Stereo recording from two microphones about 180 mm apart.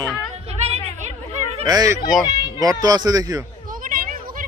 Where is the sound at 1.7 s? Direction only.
20° right (ahead or behind).